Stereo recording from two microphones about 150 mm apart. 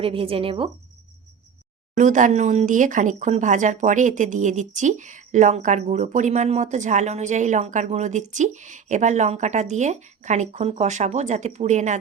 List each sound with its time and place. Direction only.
0.0 s a woman's voice: 40° right (ahead or behind)
2.0 s speech: 60° right (ahead or behind)